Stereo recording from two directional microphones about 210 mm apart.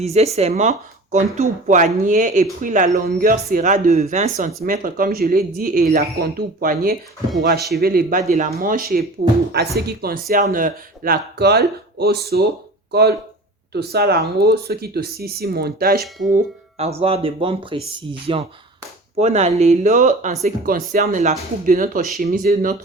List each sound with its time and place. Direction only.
0.0 s speech: 30° right (ahead or behind); by 16.0 s 45° right (ahead or behind)
16.3 s speech: 30° right (ahead or behind)